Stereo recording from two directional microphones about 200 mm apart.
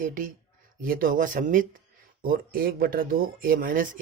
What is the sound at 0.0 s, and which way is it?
Speech, 40° right (ahead or behind).